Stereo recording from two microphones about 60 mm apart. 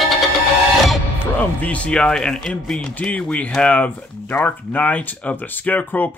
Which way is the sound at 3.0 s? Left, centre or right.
Left.